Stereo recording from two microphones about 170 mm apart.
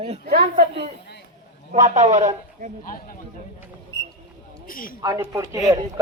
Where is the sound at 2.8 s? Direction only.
55° left (ahead or behind).